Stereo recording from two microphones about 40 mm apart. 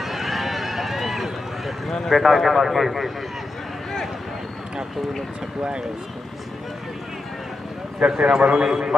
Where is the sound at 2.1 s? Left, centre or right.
Centre.